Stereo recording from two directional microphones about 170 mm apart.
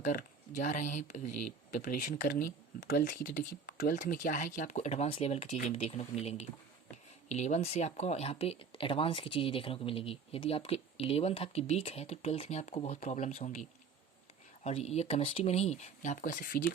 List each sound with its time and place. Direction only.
0.0 s speech: 45° left (ahead or behind)